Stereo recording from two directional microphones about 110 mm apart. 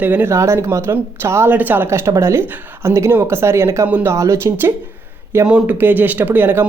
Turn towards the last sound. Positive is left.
turn(degrees=-15)  # may be behind; listen again after turning